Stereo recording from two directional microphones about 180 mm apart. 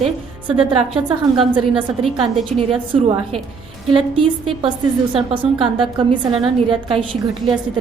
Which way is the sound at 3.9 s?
30° right (ahead or behind).